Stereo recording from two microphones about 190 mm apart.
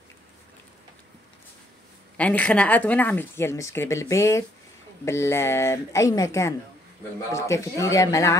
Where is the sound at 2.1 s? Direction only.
5° left (ahead or behind).